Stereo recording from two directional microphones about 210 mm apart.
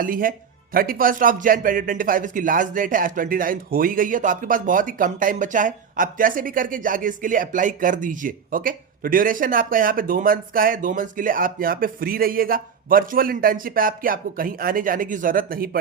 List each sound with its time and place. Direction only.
0.0 s speech: 40° right (ahead or behind)